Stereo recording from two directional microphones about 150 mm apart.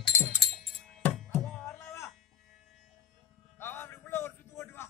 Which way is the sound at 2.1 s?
Centre (ahead or behind).